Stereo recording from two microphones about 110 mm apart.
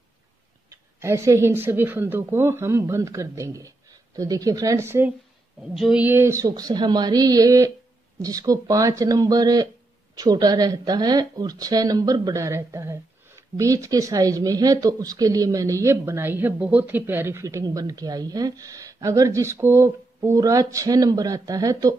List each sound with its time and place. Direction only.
0.7 s a woman's voice: 25° right (ahead or behind)
5.6 s speech: 5° right (ahead or behind)
6.0 s a woman's voice: 25° right (ahead or behind)